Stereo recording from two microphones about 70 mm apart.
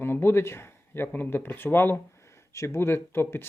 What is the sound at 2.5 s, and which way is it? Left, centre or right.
Speech, left.